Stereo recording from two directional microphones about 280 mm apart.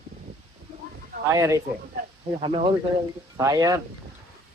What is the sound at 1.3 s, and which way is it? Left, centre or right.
Speech, centre.